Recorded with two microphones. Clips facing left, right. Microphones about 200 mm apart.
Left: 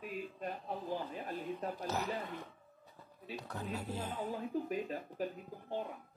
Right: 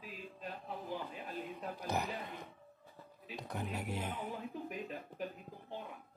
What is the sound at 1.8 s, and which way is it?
Speech, 15° right (ahead or behind).